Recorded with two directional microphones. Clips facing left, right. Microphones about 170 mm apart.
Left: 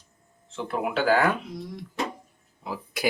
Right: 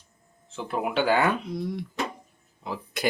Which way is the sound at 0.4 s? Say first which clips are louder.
Even; centre (ahead or behind).